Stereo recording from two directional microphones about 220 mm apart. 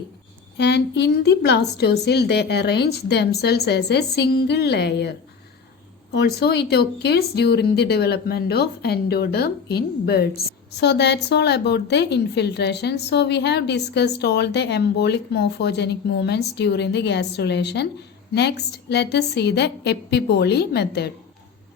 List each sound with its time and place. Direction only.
0.5 s speech: 50° left (ahead or behind)